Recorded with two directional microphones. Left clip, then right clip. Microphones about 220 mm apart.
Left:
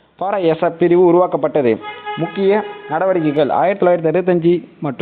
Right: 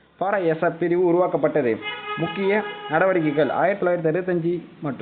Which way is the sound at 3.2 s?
25° left (ahead or behind).